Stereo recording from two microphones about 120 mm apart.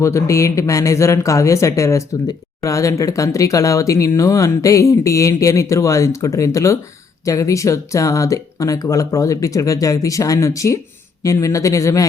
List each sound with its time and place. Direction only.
0.0 s speech: 25° left (ahead or behind)